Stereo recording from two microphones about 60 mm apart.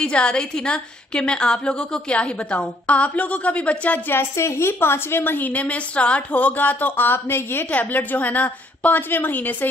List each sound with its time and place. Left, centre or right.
0.0 s a woman's voice: centre
4.1 s a woman's voice: left